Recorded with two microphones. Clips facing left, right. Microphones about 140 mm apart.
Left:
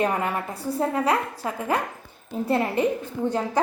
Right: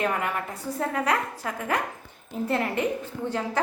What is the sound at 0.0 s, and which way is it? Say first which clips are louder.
A woman's voice: left 3 dB; 30° left (ahead or behind).